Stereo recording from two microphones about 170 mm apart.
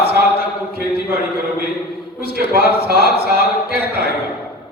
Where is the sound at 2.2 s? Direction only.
65° right (ahead or behind).